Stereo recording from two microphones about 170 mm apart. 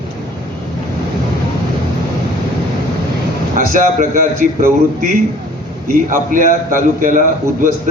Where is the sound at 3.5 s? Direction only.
50° right (ahead or behind).